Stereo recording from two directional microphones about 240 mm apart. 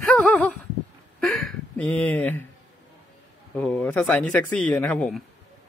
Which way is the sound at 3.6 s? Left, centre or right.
Centre.